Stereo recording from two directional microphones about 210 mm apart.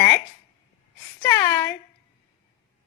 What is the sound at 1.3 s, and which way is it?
Speech, 10° left (ahead or behind).